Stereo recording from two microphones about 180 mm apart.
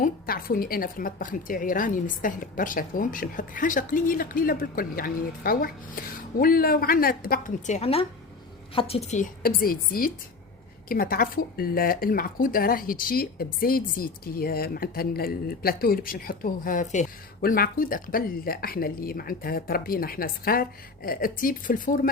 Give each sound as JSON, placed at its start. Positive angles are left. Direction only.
{"t": 0.0, "sound": "a woman's voice", "side_deg": 55}
{"t": 17.4, "sound": "a woman's voice", "side_deg": 55}